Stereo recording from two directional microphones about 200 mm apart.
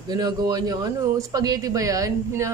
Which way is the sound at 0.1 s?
20° right (ahead or behind).